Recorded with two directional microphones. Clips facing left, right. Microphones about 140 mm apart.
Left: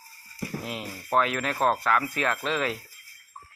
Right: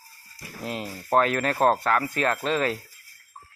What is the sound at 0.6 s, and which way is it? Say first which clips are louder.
Speech: right 3 dB; 35° right (ahead or behind).